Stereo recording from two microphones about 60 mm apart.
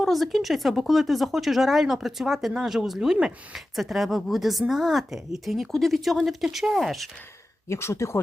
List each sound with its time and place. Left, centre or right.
0.0 s speech: centre
7.7 s speech: left